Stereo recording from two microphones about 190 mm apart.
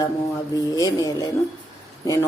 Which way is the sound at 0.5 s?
20° left (ahead or behind).